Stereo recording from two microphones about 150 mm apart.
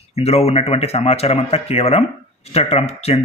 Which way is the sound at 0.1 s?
45° left (ahead or behind).